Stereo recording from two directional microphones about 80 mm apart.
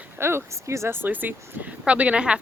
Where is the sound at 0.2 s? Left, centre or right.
Right.